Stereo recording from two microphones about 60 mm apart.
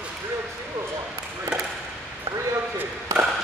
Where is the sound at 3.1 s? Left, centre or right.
Right.